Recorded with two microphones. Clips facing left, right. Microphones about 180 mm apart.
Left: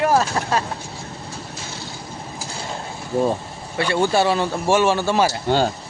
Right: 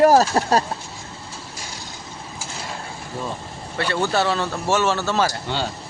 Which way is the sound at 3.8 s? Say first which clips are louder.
Left 3 dB; 10° left (ahead or behind).